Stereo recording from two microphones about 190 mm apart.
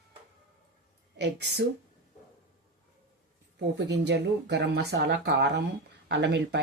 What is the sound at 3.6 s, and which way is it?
Speech, 70° right (ahead or behind).